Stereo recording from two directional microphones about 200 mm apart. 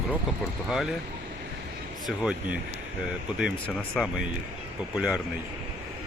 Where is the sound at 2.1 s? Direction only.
5° right (ahead or behind).